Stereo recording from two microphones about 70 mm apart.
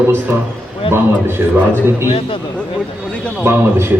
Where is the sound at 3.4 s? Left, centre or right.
Right.